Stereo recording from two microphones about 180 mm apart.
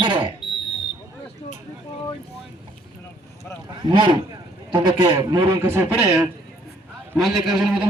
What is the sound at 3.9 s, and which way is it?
A man's voice, 25° right (ahead or behind).